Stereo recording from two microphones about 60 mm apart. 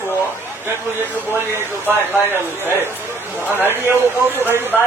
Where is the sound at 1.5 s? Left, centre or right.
Right.